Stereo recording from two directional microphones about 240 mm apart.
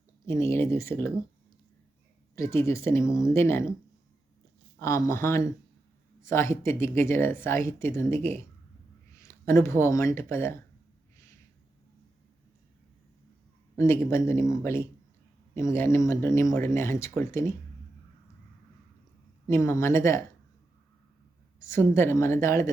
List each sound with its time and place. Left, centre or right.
0.3 s speech: centre
2.3 s speech: centre
4.8 s speech: centre
13.7 s speech: centre
19.5 s speech: centre
21.6 s speech: centre